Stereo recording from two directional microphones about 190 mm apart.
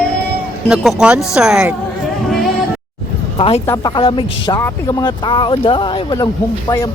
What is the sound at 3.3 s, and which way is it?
Speech, 30° left (ahead or behind).